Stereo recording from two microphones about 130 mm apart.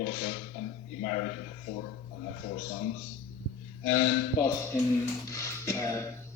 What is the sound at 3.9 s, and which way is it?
Speech, 90° left.